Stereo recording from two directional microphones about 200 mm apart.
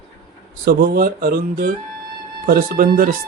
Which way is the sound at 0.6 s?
50° right (ahead or behind).